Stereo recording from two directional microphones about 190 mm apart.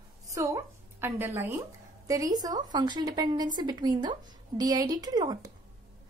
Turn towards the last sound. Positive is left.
turn(degrees=-20)  # may be behind; listen again after turning